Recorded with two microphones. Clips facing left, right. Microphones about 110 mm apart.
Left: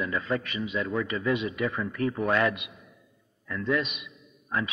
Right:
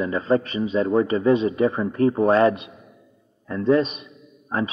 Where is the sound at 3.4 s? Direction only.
35° right (ahead or behind).